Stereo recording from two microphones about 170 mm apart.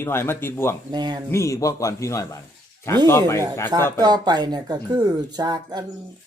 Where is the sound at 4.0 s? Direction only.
25° right (ahead or behind).